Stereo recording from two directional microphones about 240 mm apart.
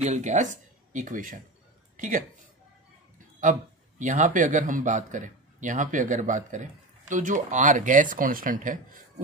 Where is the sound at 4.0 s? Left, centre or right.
Right.